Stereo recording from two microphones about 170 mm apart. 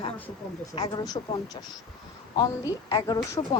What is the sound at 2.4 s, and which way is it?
A woman's voice, 25° left (ahead or behind).